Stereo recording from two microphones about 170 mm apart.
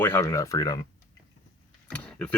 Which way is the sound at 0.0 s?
15° left (ahead or behind).